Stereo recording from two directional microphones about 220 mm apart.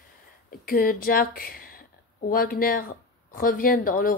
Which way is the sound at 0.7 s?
40° left (ahead or behind).